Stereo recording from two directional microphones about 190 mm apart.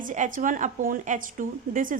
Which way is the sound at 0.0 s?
45° right (ahead or behind).